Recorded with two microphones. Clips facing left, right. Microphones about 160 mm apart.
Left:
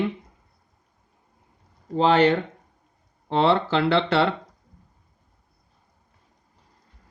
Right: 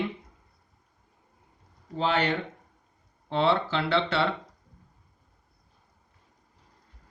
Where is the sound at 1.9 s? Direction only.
90° left.